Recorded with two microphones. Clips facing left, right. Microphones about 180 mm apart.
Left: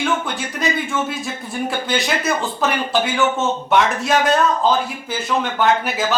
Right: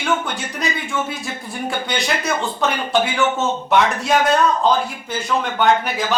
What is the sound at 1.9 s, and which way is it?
Speech, centre (ahead or behind).